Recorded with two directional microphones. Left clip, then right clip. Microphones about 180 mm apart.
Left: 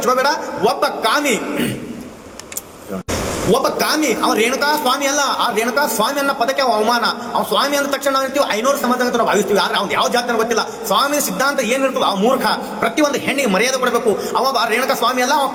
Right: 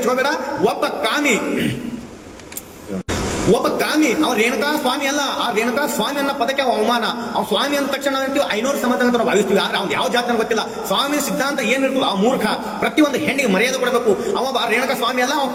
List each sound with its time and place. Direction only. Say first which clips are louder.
0.2 s a man's voice: left 2 dB; 15° right (ahead or behind)
3.5 s a man's voice: left 1 dB; 15° right (ahead or behind)